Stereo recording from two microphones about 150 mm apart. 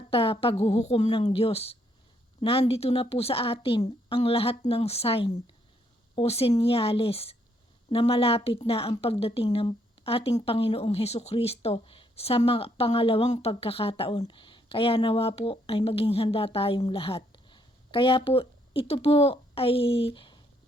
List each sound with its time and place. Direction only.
0.1 s a woman's voice: 40° left (ahead or behind)